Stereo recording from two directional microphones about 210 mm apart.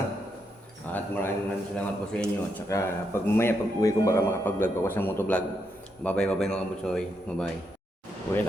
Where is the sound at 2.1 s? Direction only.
5° left (ahead or behind).